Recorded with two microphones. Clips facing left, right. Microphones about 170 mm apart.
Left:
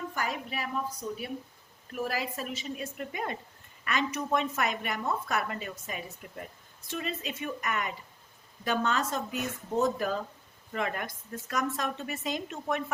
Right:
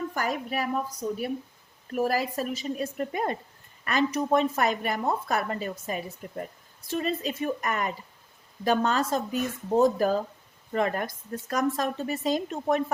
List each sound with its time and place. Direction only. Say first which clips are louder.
0.1 s a woman's voice: right 5 dB; 45° right (ahead or behind)
1.9 s a woman's voice: right 7 dB; 40° right (ahead or behind)